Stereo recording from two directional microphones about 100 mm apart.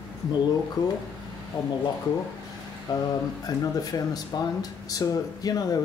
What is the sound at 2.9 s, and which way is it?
Speech, 40° left (ahead or behind).